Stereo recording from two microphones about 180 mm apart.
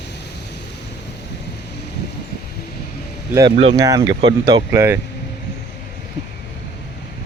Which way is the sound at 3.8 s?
20° right (ahead or behind).